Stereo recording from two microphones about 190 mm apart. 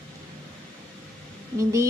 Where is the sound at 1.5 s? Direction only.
15° right (ahead or behind).